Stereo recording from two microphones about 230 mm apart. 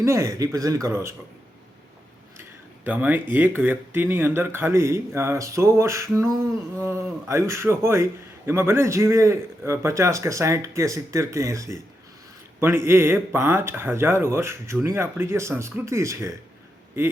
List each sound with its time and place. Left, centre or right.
0.0 s a man's voice: centre
2.4 s a sound: centre
3.3 s a man's voice: centre